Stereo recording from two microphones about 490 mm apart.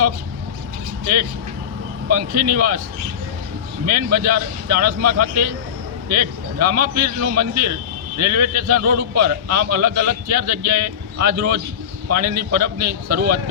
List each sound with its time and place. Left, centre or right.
2.0 s a man's voice: right
3.8 s a man's voice: right